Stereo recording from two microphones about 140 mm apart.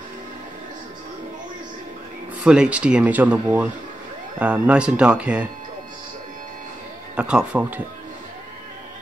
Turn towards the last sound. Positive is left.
turn(degrees=-10)  # may be behind; listen again after turning